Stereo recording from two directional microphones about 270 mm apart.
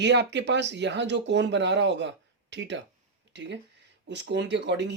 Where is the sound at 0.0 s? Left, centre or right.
Right.